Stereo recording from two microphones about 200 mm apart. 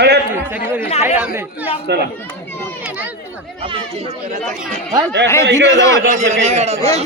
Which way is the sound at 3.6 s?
30° right (ahead or behind).